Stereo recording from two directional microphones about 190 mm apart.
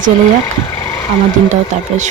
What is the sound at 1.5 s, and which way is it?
Speech, 40° right (ahead or behind).